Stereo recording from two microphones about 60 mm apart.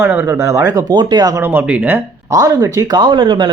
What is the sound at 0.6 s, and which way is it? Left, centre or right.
Speech, right.